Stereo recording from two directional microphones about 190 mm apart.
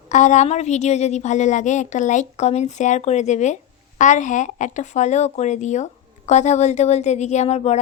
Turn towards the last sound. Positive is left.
turn(degrees=35)  # may be behind; listen again after turning